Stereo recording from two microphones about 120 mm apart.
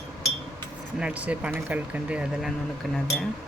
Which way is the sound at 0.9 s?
10° right (ahead or behind).